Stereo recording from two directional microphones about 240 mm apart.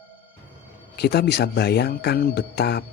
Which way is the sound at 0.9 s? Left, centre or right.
Left.